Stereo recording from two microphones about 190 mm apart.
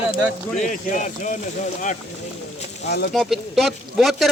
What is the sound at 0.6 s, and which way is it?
Speech, 40° left (ahead or behind).